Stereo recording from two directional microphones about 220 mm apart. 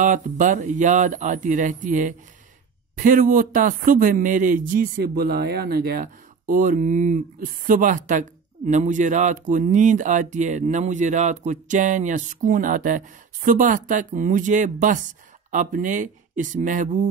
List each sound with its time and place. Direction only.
0.0 s speech: 35° right (ahead or behind)